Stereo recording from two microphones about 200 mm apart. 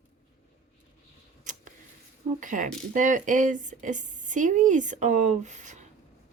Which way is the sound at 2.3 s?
40° right (ahead or behind).